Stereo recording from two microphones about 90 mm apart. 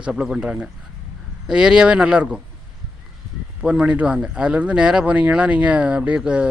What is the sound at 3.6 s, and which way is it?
Speech, 10° right (ahead or behind).